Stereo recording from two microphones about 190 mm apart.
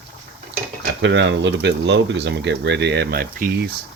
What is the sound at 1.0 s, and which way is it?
Speech, 70° right (ahead or behind).